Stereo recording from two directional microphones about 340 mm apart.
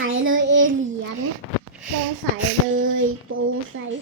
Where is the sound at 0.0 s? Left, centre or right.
Right.